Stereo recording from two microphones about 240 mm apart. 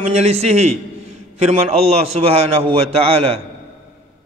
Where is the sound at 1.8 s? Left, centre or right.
Right.